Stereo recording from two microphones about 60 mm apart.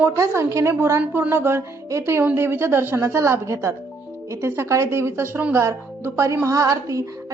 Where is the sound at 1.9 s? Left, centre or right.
Right.